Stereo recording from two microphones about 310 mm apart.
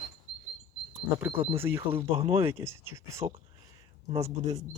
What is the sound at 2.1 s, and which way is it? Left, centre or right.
Speech, centre.